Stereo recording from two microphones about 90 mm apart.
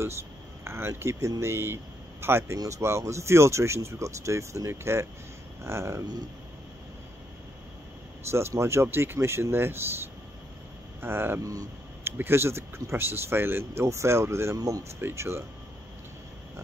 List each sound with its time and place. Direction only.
0.0 s speech: 30° right (ahead or behind)
8.3 s speech: 30° right (ahead or behind)
11.0 s speech: 25° right (ahead or behind)